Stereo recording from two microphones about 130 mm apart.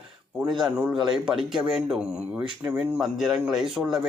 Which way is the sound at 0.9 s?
35° right (ahead or behind).